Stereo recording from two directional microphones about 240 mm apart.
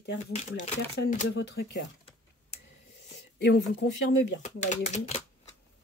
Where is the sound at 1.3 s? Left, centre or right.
Left.